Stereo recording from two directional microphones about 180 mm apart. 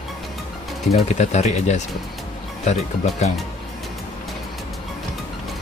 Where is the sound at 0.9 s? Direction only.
40° left (ahead or behind).